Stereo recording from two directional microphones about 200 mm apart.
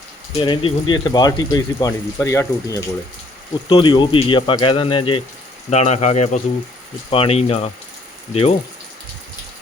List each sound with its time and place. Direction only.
0.3 s speech: 25° left (ahead or behind)